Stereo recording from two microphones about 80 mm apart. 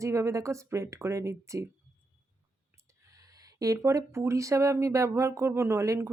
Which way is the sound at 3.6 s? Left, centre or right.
Right.